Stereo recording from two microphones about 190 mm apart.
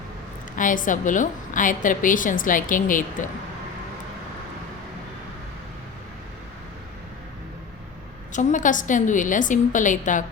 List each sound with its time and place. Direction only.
0.5 s a woman's voice: 45° left (ahead or behind)
8.3 s a woman's voice: 40° left (ahead or behind)